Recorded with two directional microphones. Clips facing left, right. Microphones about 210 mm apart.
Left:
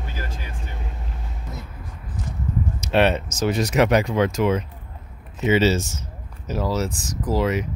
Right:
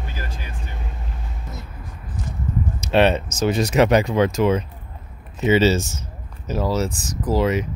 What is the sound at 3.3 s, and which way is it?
Speech, 25° right (ahead or behind).